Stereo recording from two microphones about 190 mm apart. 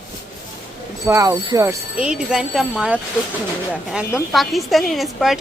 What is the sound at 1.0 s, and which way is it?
Speech, 15° right (ahead or behind).